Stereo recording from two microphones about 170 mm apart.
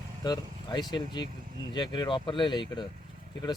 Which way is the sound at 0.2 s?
20° left (ahead or behind).